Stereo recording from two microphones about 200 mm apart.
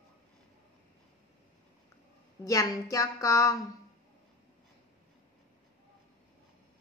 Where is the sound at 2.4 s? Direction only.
15° left (ahead or behind).